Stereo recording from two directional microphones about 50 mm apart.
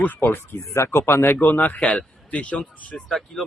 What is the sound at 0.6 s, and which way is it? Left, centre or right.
Speech, left.